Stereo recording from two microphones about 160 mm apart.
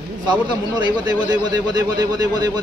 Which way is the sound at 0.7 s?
25° right (ahead or behind).